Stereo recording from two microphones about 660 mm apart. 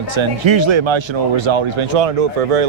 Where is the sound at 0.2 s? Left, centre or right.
Right.